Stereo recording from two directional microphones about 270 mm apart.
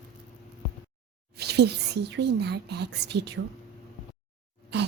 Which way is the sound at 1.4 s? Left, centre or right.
Right.